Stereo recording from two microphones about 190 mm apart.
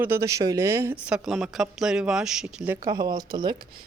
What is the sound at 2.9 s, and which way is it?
Speech, 20° right (ahead or behind).